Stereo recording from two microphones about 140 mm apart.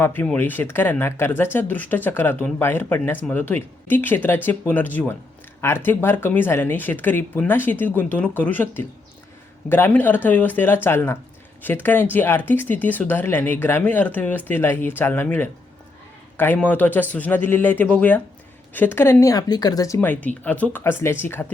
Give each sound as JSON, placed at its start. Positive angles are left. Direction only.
{"t": 0.0, "sound": "speech", "side_deg": 15}